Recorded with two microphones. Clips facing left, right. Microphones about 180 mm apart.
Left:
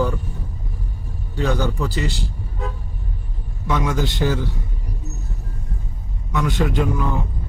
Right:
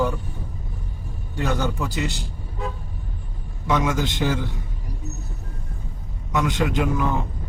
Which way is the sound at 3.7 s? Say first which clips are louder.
Even; 20° right (ahead or behind).